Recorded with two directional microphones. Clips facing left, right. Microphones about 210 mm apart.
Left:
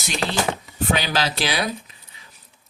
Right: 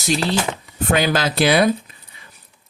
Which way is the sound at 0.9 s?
50° right (ahead or behind).